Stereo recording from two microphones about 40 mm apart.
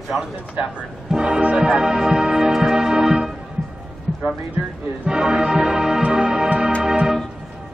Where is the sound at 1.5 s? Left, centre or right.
Centre.